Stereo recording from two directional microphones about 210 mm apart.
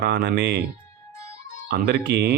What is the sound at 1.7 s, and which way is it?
Speech, 50° right (ahead or behind).